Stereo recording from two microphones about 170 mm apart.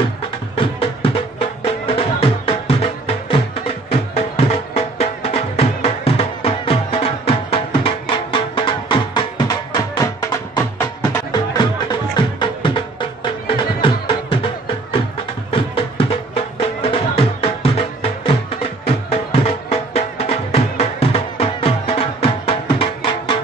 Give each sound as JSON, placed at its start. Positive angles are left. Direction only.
{"t": 0.6, "sound": "music", "side_deg": 35}